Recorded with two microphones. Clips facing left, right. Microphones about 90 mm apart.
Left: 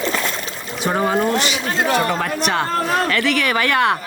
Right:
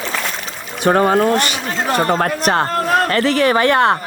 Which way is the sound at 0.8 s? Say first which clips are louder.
Right 5 dB; 60° right (ahead or behind).